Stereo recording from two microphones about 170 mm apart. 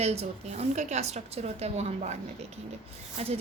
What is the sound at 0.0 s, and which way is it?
A woman's voice, 40° right (ahead or behind).